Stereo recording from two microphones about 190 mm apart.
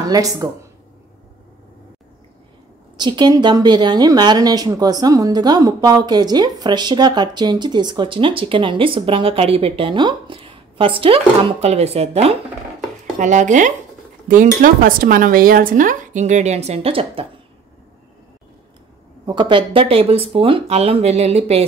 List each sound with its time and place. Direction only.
0.0 s speech: 20° right (ahead or behind)
3.0 s speech: 25° right (ahead or behind)
19.2 s speech: 25° right (ahead or behind)